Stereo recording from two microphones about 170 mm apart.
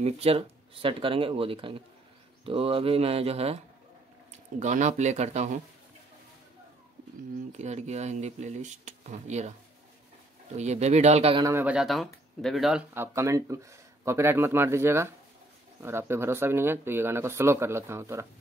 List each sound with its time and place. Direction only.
0.0 s speech: 35° right (ahead or behind)
7.5 s speech: 40° right (ahead or behind)
10.5 s speech: 40° right (ahead or behind)
11.4 s speech: 10° right (ahead or behind)
12.9 s speech: 15° right (ahead or behind)